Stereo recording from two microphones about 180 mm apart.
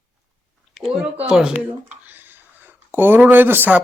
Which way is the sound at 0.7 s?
Centre (ahead or behind).